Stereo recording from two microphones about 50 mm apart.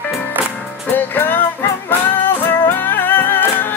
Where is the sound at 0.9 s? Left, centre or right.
Left.